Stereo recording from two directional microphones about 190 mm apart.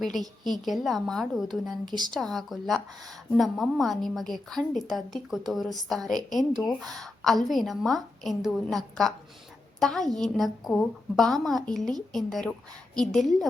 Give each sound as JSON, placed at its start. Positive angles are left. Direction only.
{"t": 0.0, "sound": "a woman's voice", "side_deg": 0}
{"t": 1.9, "sound": "speech", "side_deg": -20}
{"t": 2.1, "sound": "a woman's voice", "side_deg": 0}